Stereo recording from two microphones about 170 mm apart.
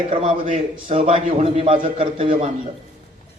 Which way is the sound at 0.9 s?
45° right (ahead or behind).